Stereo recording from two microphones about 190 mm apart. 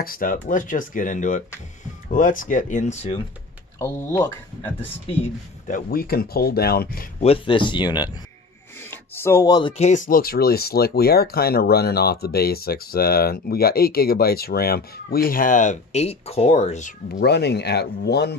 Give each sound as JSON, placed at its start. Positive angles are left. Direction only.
{"t": 0.0, "sound": "speech", "side_deg": 50}
{"t": 5.7, "sound": "speech", "side_deg": 50}
{"t": 7.2, "sound": "speech", "side_deg": 30}
{"t": 17.1, "sound": "speech", "side_deg": 60}